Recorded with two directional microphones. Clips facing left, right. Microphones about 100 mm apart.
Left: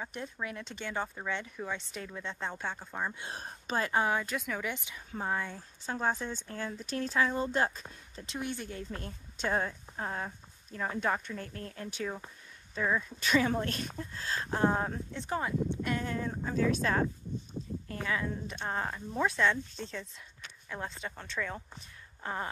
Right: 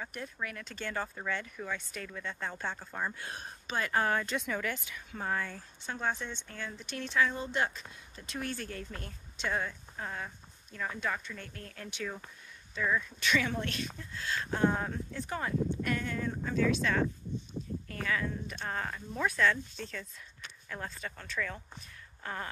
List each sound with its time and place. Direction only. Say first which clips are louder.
0.0 s speech: left 1 dB; 20° left (ahead or behind)
3.2 s speech: left 1 dB; 30° left (ahead or behind)
3.9 s speech: right 1 dB; 15° left (ahead or behind)
4.6 s speech: right 1 dB; 20° left (ahead or behind)
5.9 s speech: left 3 dB; 35° left (ahead or behind)
8.4 s a woman's voice: left 1 dB; 20° left (ahead or behind); by 17.0 s 35° left (ahead or behind)
17.8 s speech: left 1 dB; 20° left (ahead or behind)
22.2 s a sound: left 3 dB; 20° left (ahead or behind)